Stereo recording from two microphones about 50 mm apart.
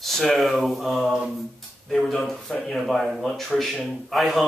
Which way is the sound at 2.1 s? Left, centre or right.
Centre.